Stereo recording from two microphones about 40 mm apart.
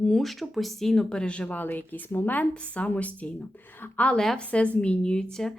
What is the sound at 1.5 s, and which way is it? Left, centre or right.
Speech, left.